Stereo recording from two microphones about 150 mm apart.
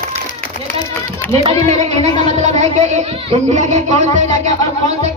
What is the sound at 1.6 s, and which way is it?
Speech, 50° right (ahead or behind).